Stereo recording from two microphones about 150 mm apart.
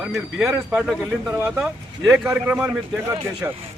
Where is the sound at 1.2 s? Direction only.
20° right (ahead or behind).